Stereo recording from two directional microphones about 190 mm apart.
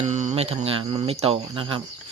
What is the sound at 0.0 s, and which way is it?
Speech, 40° right (ahead or behind).